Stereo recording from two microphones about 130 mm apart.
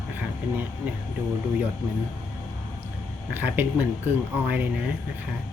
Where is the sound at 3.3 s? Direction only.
15° right (ahead or behind).